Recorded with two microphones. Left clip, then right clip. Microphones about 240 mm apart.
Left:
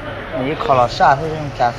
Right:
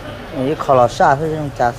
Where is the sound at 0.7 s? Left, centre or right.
Right.